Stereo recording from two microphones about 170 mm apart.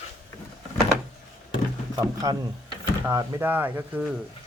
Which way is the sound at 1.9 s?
20° right (ahead or behind).